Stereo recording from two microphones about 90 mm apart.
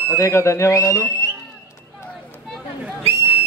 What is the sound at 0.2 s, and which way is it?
Speech, 30° left (ahead or behind).